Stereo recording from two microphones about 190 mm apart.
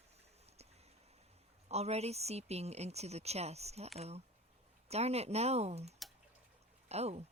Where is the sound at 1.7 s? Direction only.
35° right (ahead or behind).